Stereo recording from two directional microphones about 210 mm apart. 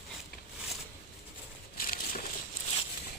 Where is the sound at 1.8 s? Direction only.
45° left (ahead or behind).